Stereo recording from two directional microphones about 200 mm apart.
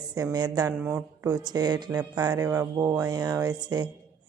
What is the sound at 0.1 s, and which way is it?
Speech, 20° right (ahead or behind).